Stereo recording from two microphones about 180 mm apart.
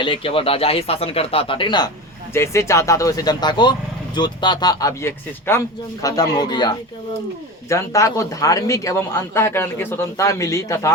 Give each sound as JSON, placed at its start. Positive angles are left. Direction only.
{"t": 0.0, "sound": "speech", "side_deg": 30}